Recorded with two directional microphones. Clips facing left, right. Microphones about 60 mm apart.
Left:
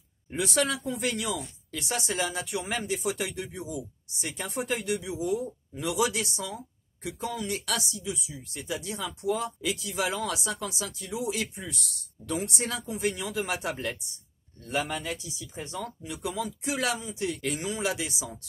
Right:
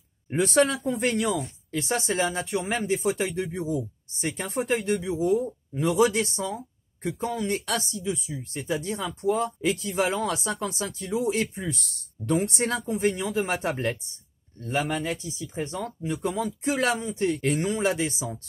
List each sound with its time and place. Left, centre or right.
0.3 s speech: right